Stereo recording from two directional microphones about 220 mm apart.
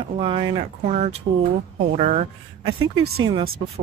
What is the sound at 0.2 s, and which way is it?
Speech, 25° right (ahead or behind).